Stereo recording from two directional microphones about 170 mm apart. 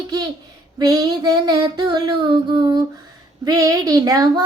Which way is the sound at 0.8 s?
25° right (ahead or behind).